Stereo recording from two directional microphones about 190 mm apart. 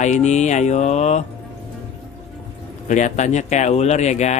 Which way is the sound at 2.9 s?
40° left (ahead or behind).